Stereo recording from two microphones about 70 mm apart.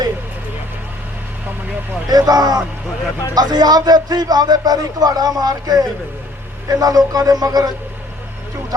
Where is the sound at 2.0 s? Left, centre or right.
Right.